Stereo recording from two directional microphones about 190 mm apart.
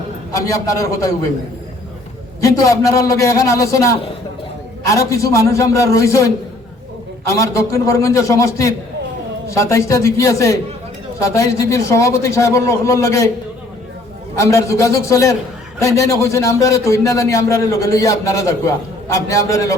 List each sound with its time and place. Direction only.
0.3 s speech: 15° left (ahead or behind)
2.4 s speech: 15° left (ahead or behind)
14.3 s speech: 15° left (ahead or behind)